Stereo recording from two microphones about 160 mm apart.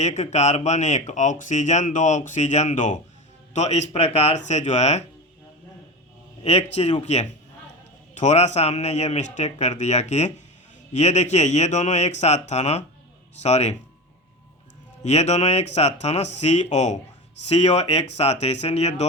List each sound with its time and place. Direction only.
0.0 s speech: 45° left (ahead or behind)
6.4 s a man's voice: 40° left (ahead or behind)
15.0 s speech: 45° left (ahead or behind)